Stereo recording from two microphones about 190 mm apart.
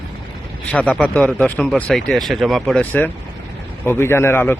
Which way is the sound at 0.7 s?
5° left (ahead or behind).